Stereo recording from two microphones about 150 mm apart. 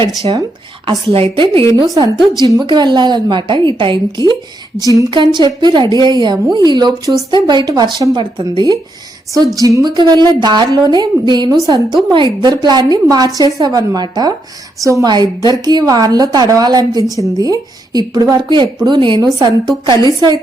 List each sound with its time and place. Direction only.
0.2 s a woman's voice: 35° right (ahead or behind)
2.5 s a woman's voice: 25° right (ahead or behind)